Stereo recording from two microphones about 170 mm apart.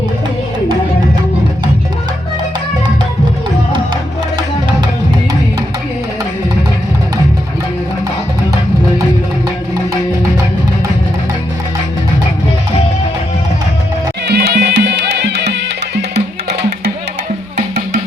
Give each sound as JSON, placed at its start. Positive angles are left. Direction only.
{"t": 14.3, "sound": "music", "side_deg": -70}